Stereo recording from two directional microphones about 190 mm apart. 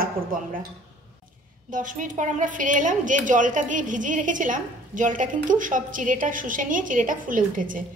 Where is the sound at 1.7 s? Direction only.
45° right (ahead or behind).